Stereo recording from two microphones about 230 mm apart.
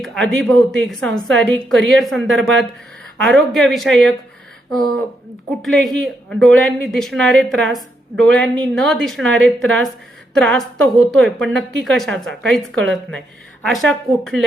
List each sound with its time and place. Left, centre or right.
0.0 s a woman's voice: centre